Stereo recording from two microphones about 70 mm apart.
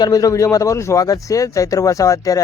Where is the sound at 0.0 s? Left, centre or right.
Left.